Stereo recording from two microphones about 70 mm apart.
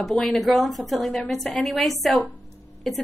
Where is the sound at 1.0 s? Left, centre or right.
Centre.